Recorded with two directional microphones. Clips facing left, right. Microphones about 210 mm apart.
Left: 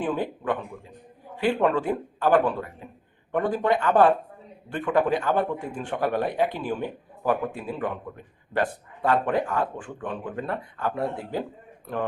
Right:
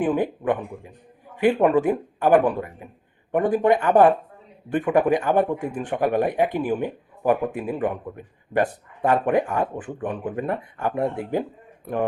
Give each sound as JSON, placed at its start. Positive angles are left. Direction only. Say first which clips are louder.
{"t": 0.0, "sound": "a man's voice", "louder": "right 5 dB", "side_deg": -20}